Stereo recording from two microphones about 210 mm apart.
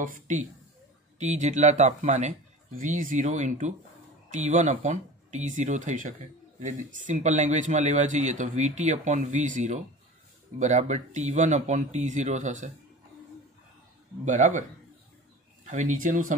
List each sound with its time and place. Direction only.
0.0 s speech: 40° right (ahead or behind)
14.2 s speech: 35° right (ahead or behind)
15.6 s speech: 35° right (ahead or behind)